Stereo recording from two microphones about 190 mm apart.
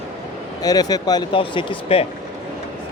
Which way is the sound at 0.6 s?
20° left (ahead or behind).